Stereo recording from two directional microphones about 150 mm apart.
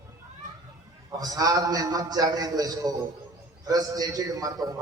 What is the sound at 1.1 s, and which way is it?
A man's voice, 25° right (ahead or behind).